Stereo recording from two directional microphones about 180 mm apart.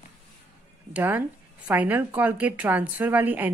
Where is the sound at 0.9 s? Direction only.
10° right (ahead or behind).